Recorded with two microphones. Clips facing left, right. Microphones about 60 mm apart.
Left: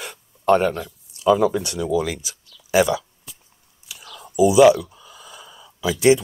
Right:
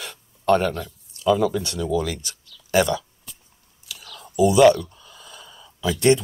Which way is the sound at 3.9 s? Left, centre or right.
Left.